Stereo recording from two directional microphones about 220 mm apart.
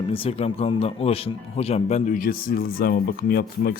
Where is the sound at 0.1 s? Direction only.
25° left (ahead or behind).